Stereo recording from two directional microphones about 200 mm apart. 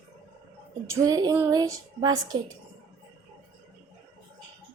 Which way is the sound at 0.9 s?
15° right (ahead or behind).